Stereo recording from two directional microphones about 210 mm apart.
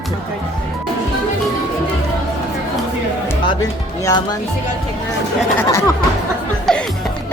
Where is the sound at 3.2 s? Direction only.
15° left (ahead or behind).